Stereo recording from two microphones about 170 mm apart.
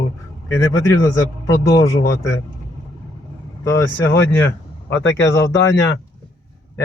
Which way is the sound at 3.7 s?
90° left.